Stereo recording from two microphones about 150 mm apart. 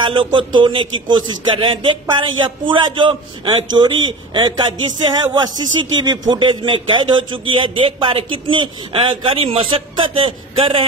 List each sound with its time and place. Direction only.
0.0 s a man's voice: 35° right (ahead or behind)